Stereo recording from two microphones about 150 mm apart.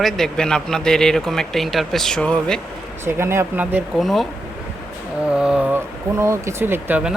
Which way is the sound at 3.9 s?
Centre (ahead or behind).